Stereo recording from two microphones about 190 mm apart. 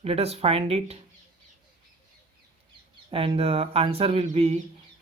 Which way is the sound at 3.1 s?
30° right (ahead or behind).